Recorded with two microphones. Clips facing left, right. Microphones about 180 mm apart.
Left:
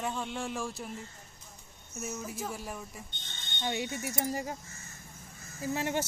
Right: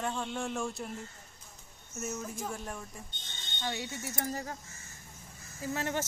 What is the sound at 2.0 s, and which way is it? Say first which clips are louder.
Speech: even; 5° left (ahead or behind).